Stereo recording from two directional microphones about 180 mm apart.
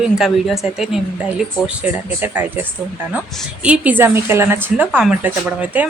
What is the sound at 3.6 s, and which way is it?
Speech, 5° right (ahead or behind).